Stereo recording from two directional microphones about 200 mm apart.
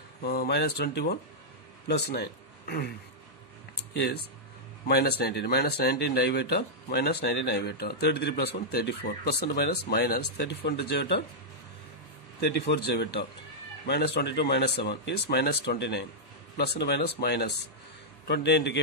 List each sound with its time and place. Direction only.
0.2 s speech: 50° left (ahead or behind)
4.8 s speech: 55° left (ahead or behind)
12.4 s speech: 55° left (ahead or behind)